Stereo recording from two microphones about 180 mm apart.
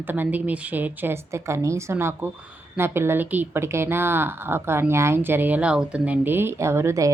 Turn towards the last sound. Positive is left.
turn(degrees=-15)  # may be behind; listen again after turning